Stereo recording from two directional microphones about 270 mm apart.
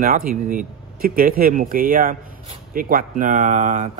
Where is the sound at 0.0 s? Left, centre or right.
Right.